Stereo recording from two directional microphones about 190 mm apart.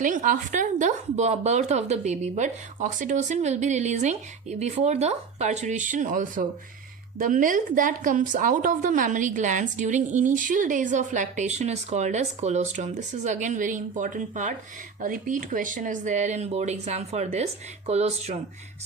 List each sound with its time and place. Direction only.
0.0 s a woman's voice: 45° right (ahead or behind)